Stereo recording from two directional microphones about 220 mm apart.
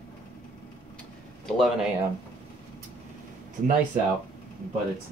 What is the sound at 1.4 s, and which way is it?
Speech, centre (ahead or behind).